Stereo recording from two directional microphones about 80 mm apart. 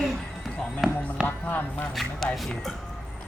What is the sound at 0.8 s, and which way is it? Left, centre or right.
Music, centre.